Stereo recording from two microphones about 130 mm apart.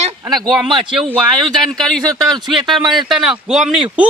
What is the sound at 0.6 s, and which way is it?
Speech, 40° right (ahead or behind).